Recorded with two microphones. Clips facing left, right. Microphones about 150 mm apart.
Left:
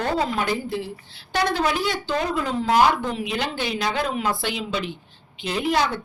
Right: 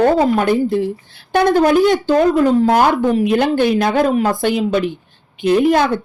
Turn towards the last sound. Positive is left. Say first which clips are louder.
# right 9 dB
turn(degrees=-50)  # may be behind; listen again after turning